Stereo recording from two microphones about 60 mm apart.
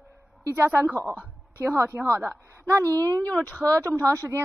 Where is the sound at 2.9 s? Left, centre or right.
Right.